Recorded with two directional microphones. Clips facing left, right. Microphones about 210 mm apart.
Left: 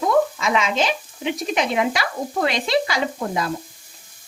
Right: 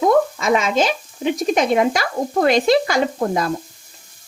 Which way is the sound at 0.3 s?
45° right (ahead or behind).